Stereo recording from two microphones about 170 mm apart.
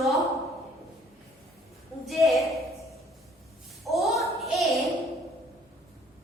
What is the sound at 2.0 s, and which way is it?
Speech, centre (ahead or behind).